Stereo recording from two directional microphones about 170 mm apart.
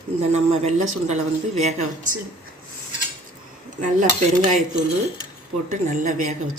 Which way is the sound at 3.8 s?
45° right (ahead or behind).